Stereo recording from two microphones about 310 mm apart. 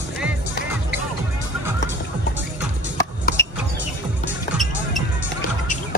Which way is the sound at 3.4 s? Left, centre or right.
Centre.